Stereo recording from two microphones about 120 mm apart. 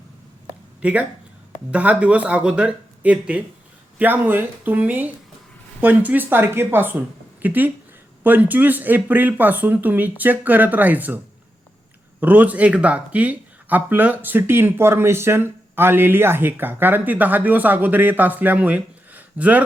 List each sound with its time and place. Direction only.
0.8 s speech: 10° right (ahead or behind)
12.2 s speech: 15° right (ahead or behind)